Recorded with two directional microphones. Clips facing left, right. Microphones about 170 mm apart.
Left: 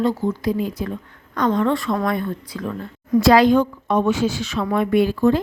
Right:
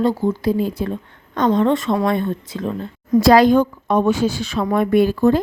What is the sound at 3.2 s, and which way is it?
A woman's voice, 40° right (ahead or behind).